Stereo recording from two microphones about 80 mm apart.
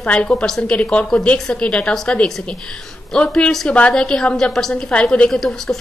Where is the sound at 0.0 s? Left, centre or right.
Centre.